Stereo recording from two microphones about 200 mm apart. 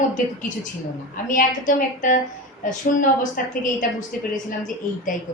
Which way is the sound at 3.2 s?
40° left (ahead or behind).